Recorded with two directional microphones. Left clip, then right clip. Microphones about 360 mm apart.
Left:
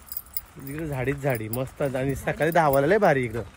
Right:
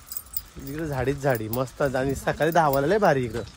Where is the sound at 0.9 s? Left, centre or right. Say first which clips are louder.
Right 2 dB; centre.